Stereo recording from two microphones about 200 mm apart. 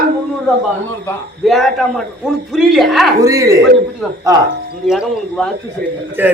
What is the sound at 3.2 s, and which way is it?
Speech, 15° right (ahead or behind).